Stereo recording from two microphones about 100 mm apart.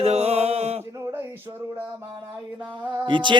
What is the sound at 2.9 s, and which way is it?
Speech, 50° right (ahead or behind).